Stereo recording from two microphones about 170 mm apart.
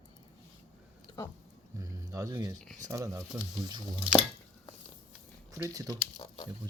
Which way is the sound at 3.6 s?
25° right (ahead or behind).